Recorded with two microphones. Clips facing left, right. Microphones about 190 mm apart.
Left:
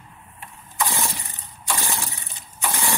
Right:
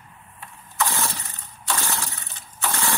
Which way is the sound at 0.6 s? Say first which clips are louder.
Even; 15° left (ahead or behind).